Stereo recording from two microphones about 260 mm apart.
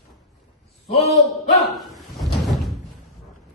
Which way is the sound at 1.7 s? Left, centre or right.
Centre.